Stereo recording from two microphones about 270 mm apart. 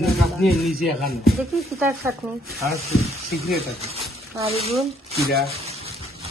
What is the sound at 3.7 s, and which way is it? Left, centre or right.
Speech, right.